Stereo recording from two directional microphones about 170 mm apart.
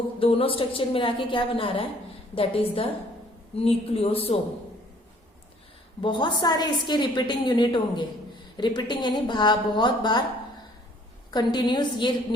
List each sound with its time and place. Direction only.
0.2 s a woman's voice: 35° left (ahead or behind)
6.0 s a woman's voice: 25° left (ahead or behind)
11.3 s a woman's voice: 25° left (ahead or behind)